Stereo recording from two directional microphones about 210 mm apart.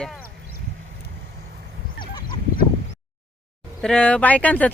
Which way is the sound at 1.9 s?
20° left (ahead or behind).